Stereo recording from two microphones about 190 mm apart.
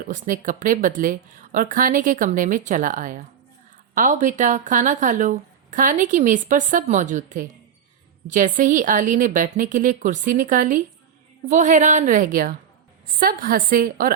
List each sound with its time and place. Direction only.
0.0 s speech: 45° right (ahead or behind)